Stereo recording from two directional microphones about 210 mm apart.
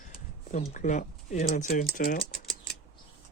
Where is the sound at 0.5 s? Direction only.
35° left (ahead or behind).